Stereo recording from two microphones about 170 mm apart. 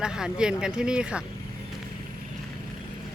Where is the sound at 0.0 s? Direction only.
5° right (ahead or behind).